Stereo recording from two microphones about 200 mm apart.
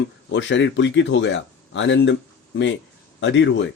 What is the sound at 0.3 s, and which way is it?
Speech, 65° left (ahead or behind).